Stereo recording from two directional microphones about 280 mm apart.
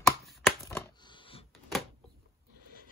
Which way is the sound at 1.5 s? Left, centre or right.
Centre.